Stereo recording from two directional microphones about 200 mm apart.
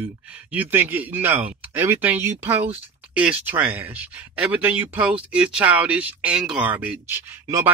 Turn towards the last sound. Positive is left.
turn(degrees=-10)  # may be behind; listen again after turning